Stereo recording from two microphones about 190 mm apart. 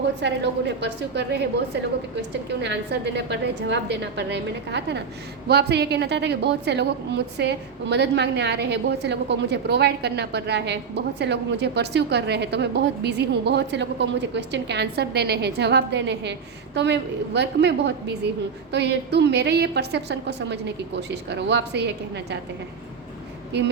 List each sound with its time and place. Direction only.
0.2 s a woman's voice: 65° right (ahead or behind)
2.5 s a woman's voice: 65° right (ahead or behind)